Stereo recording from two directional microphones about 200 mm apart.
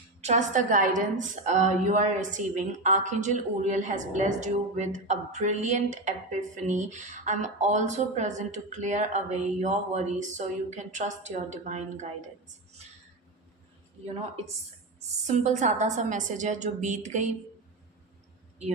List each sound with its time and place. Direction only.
0.2 s a woman's voice: 35° right (ahead or behind)
15.3 s a woman's voice: 35° right (ahead or behind)